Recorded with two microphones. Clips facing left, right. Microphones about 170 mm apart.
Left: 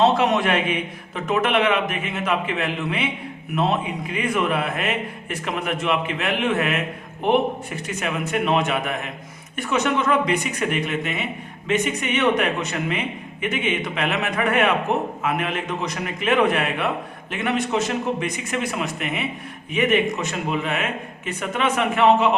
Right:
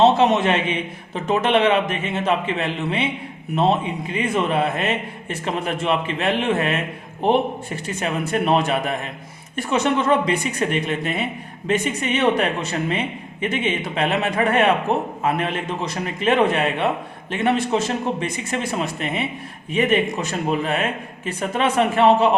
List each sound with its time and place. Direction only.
0.0 s a man's voice: 25° right (ahead or behind)